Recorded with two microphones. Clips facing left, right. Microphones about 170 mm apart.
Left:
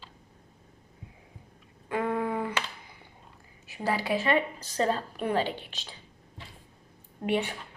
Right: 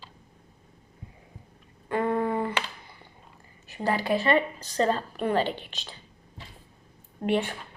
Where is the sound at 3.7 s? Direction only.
5° left (ahead or behind).